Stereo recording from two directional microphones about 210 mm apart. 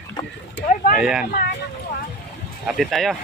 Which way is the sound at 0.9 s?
5° right (ahead or behind).